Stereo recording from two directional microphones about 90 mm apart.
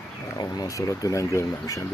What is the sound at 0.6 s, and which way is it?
Speech, 40° left (ahead or behind).